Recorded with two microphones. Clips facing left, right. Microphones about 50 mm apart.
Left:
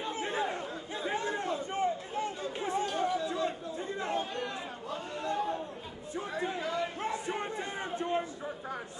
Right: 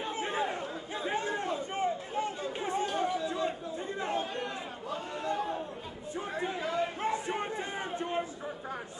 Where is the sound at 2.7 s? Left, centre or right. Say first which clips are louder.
Even; right.